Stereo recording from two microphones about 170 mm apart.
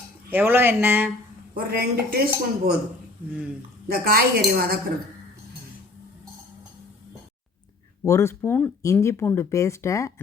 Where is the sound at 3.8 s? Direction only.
60° right (ahead or behind).